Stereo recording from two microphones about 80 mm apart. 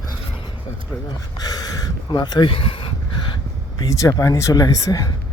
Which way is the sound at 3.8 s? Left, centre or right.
Left.